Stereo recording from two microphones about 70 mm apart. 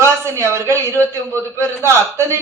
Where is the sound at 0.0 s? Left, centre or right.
Right.